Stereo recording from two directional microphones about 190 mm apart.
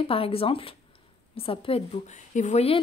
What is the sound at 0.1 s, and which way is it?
A woman's voice, 30° left (ahead or behind).